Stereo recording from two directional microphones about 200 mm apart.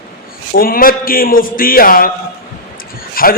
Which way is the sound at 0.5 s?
45° left (ahead or behind).